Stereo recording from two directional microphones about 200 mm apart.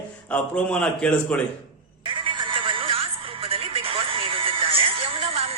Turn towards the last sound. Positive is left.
turn(degrees=-25)  # may be behind; listen again after turning